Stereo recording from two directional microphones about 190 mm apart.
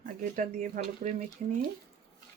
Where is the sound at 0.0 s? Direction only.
45° right (ahead or behind).